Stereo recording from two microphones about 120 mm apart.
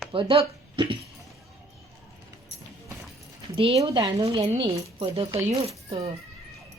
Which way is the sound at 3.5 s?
50° right (ahead or behind).